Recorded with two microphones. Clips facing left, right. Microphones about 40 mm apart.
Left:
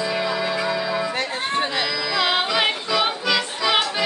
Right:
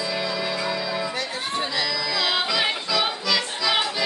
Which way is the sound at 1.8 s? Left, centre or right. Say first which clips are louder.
Left 3 dB; centre.